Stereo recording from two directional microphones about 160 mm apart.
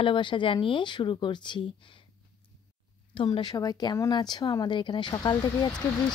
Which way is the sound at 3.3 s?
25° left (ahead or behind).